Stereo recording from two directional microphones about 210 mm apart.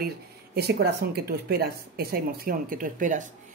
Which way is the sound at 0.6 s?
50° right (ahead or behind).